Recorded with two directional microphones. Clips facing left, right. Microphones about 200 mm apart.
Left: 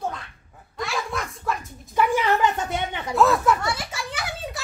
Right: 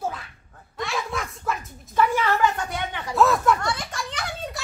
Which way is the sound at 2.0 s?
15° left (ahead or behind).